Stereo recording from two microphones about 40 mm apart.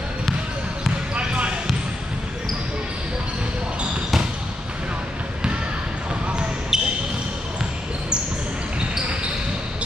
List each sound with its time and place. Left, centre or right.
1.1 s basketball bounce: right
6.7 s basketball bounce: centre